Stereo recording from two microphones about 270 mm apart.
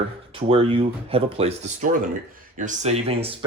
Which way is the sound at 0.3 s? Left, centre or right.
Right.